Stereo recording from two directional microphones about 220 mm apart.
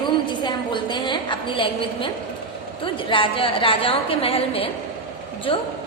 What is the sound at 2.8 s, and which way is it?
A woman's voice, 25° left (ahead or behind).